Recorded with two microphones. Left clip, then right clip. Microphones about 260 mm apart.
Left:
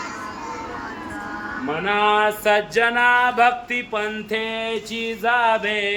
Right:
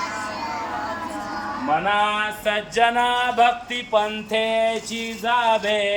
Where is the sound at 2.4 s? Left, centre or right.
Centre.